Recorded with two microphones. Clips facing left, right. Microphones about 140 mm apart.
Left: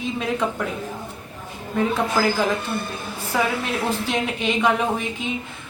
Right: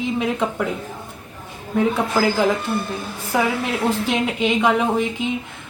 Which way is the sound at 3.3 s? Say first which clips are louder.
Right 2 dB; 15° right (ahead or behind).